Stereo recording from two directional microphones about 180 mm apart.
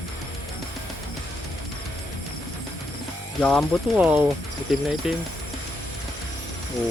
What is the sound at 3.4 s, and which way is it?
Speech, 5° left (ahead or behind).